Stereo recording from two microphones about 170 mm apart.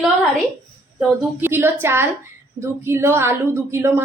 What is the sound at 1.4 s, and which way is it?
A woman's voice, 10° right (ahead or behind).